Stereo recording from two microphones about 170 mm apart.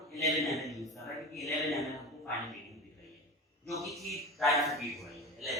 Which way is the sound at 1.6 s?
Centre (ahead or behind).